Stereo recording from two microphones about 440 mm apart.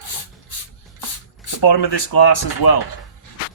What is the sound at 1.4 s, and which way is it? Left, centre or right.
Speech, left.